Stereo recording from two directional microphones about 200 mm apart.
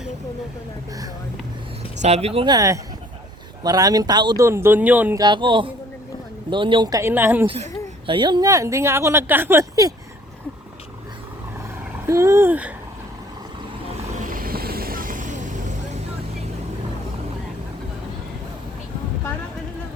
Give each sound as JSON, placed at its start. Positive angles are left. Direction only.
{"t": 2.0, "sound": "speech", "side_deg": -35}
{"t": 5.2, "sound": "speech", "side_deg": -25}
{"t": 7.4, "sound": "speech", "side_deg": -30}
{"t": 12.0, "sound": "speech", "side_deg": -15}
{"t": 14.2, "sound": "vehicle", "side_deg": -45}